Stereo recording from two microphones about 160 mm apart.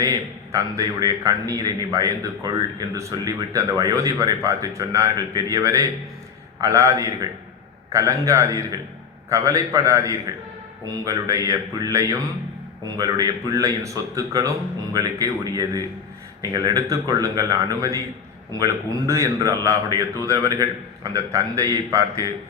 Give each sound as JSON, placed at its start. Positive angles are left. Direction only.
{"t": 0.0, "sound": "a man's voice", "side_deg": -20}